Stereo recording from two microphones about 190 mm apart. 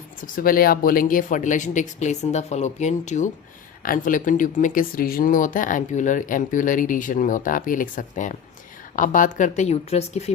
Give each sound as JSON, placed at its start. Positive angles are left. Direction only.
{"t": 0.2, "sound": "speech", "side_deg": 50}